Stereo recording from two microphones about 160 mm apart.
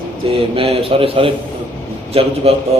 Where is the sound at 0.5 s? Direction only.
35° right (ahead or behind).